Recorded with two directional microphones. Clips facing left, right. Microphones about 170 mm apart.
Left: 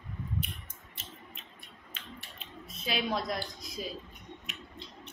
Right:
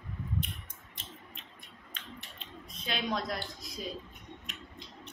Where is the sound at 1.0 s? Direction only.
5° left (ahead or behind).